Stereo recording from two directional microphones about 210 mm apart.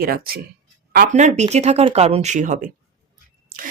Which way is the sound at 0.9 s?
35° right (ahead or behind).